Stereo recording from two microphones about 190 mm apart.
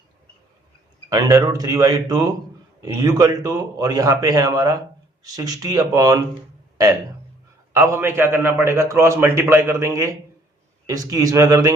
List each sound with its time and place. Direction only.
1.1 s a man's voice: 20° right (ahead or behind)
7.7 s a man's voice: 15° right (ahead or behind)